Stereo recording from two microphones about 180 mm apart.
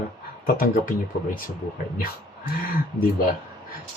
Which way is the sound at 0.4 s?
50° left (ahead or behind).